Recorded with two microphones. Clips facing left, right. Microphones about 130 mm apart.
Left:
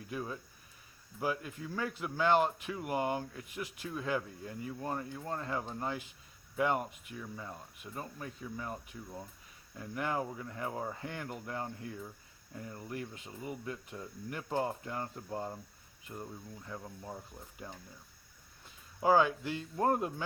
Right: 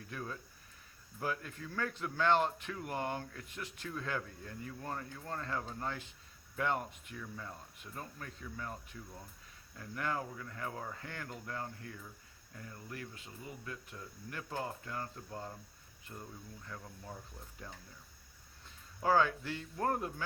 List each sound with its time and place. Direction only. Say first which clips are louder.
0.1 s speech: left 4 dB; 15° left (ahead or behind)
18.9 s speech: left 3 dB; 15° left (ahead or behind)